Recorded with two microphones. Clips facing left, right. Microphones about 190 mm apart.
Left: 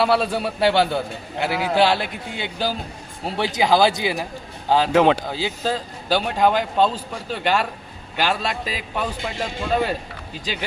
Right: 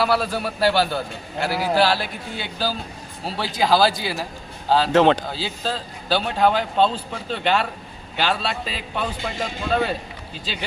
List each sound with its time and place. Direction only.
0.0 s a man's voice: 25° left (ahead or behind)